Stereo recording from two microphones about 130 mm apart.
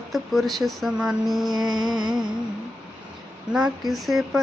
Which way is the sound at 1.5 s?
30° right (ahead or behind).